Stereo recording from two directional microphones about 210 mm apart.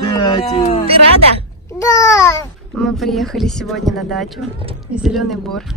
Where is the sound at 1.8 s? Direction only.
15° left (ahead or behind).